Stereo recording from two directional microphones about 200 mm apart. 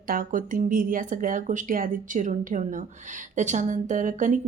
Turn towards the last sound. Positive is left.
turn(degrees=-40)  # may be behind; listen again after turning